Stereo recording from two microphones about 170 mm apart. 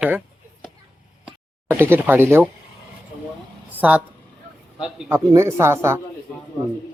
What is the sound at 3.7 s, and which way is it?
A woman's voice, 10° right (ahead or behind).